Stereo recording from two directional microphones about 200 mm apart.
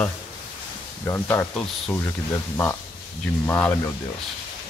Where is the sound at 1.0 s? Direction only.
10° left (ahead or behind).